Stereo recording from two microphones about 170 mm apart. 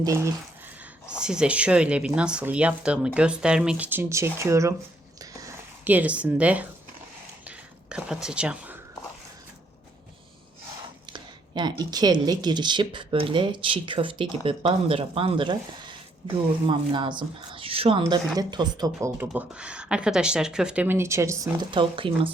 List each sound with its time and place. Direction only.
0.0 s speech: 20° right (ahead or behind)
1.2 s speech: 5° right (ahead or behind)
5.2 s zipper: 20° right (ahead or behind)
7.4 s a sound: 5° right (ahead or behind)
11.1 s speech: 25° right (ahead or behind)
16.6 s speech: 30° right (ahead or behind)
18.9 s speech: 10° right (ahead or behind); by 22.3 s 30° right (ahead or behind)